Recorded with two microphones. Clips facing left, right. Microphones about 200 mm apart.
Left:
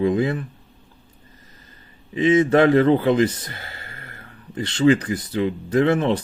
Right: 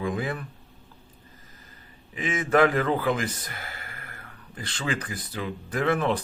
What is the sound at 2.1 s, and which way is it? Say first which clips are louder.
Speech: left 7 dB; 25° left (ahead or behind).